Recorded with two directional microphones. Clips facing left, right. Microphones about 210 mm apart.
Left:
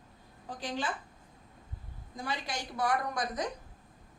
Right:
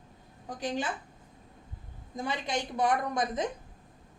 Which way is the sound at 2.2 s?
20° right (ahead or behind).